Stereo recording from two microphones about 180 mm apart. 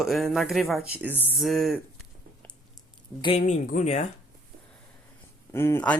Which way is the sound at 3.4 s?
45° left (ahead or behind).